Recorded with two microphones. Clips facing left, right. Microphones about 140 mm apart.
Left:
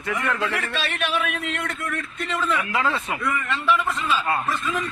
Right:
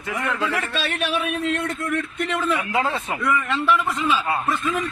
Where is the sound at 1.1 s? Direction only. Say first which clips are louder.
Right 3 dB; 25° right (ahead or behind).